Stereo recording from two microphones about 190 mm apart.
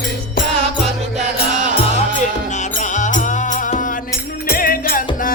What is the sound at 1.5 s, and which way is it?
Music, 40° right (ahead or behind).